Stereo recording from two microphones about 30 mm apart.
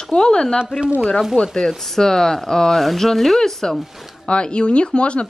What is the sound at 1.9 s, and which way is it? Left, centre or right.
Speech, centre.